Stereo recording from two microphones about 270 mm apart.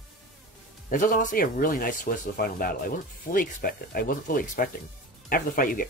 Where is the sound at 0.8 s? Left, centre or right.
Left.